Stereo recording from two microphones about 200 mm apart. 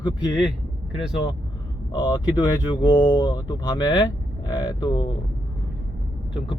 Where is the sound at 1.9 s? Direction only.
20° left (ahead or behind).